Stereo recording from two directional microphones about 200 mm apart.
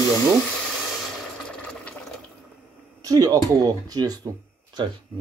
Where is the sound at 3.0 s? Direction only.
15° right (ahead or behind).